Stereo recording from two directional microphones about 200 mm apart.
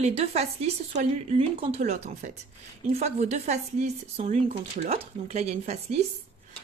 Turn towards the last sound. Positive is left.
turn(degrees=-35)  # may be behind; listen again after turning